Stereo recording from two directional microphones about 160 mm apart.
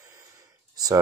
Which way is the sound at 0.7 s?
25° right (ahead or behind).